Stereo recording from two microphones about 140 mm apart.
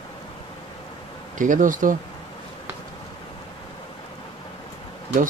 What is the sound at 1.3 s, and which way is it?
Speech, 70° right (ahead or behind).